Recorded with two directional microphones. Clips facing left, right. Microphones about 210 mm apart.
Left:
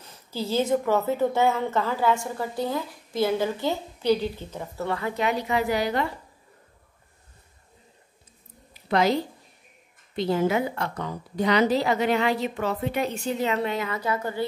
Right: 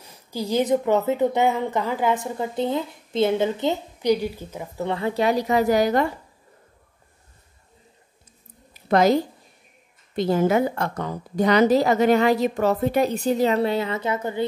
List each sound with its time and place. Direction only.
0.0 s speech: 15° right (ahead or behind)
4.8 s speech: 25° right (ahead or behind); by 6.0 s 45° right (ahead or behind)
8.8 s a woman's voice: 45° right (ahead or behind); by 14.4 s 20° right (ahead or behind)